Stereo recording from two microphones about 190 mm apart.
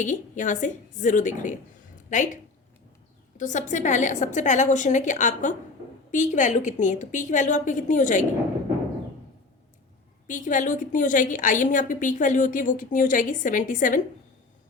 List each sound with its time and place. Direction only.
0.0 s a woman's voice: 40° left (ahead or behind)
10.2 s a woman's voice: 45° left (ahead or behind)